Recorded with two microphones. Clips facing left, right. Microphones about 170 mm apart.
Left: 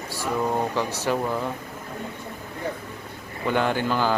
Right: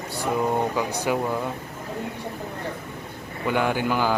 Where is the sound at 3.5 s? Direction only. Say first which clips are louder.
Even; 10° right (ahead or behind).